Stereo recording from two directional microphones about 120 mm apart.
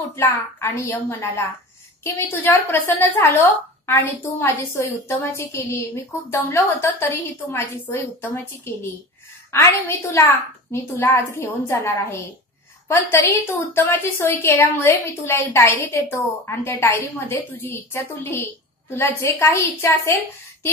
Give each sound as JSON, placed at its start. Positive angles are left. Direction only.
{"t": 0.1, "sound": "a woman's voice", "side_deg": 20}